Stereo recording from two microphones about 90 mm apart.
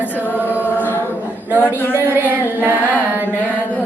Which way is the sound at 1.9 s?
20° right (ahead or behind).